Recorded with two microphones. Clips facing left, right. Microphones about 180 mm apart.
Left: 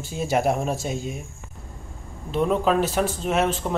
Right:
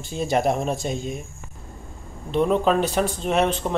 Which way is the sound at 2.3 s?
Centre (ahead or behind).